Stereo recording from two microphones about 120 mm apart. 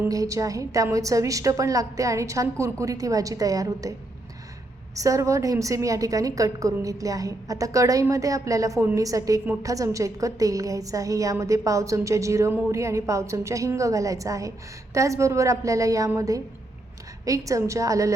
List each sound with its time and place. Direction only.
0.1 s a woman's voice: 30° right (ahead or behind)
4.9 s a woman's voice: 25° right (ahead or behind)